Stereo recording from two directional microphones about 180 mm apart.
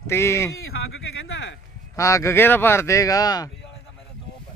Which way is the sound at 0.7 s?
80° left.